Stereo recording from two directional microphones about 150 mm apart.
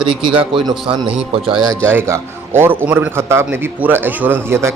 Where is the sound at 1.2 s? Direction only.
5° right (ahead or behind).